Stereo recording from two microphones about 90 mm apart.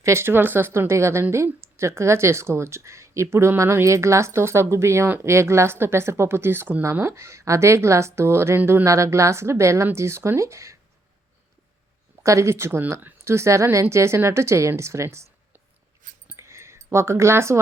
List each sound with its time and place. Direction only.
0.0 s a woman's voice: 30° right (ahead or behind)
12.2 s speech: 35° right (ahead or behind)
16.3 s a sound: 30° right (ahead or behind)